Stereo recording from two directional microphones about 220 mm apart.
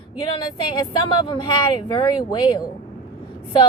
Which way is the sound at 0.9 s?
20° left (ahead or behind).